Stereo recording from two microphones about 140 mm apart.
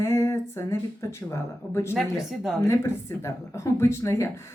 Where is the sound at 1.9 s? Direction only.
Centre (ahead or behind).